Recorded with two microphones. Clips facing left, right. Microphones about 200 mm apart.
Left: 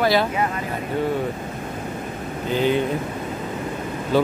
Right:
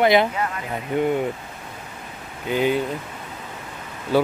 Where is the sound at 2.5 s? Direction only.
10° right (ahead or behind).